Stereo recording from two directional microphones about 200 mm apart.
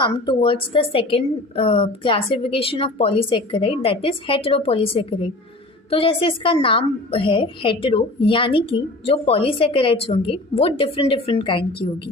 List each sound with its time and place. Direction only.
0.0 s a woman's voice: 25° left (ahead or behind)